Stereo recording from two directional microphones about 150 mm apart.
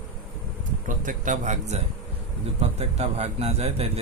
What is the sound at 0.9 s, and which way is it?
Speech, 60° right (ahead or behind).